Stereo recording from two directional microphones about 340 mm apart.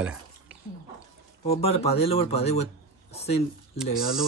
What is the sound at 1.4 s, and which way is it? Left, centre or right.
Speech, centre.